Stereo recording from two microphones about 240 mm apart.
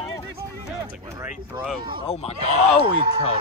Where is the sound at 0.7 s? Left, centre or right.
Centre.